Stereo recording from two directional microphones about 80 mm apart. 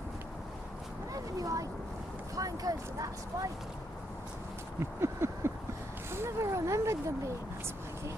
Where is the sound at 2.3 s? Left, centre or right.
Right.